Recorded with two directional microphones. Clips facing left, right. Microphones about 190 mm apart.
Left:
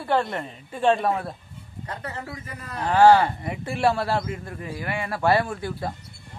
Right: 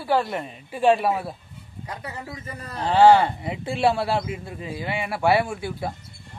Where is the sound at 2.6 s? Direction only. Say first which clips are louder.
Right 1 dB; 30° right (ahead or behind).